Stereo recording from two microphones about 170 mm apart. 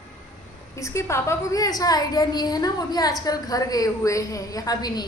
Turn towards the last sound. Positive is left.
turn(degrees=20)  # may be behind; listen again after turning